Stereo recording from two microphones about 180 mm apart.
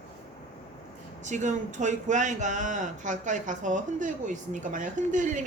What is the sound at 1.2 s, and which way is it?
Speech, 40° right (ahead or behind).